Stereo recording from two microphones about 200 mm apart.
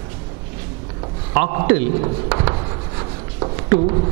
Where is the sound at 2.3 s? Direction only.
15° right (ahead or behind).